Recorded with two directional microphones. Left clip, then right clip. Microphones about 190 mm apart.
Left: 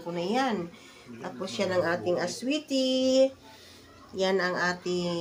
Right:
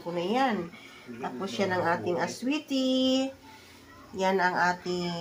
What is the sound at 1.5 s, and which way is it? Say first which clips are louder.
Speech: even; 15° right (ahead or behind).